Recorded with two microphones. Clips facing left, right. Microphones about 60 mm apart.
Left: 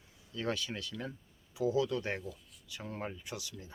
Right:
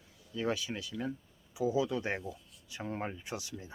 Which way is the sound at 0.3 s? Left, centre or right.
Centre.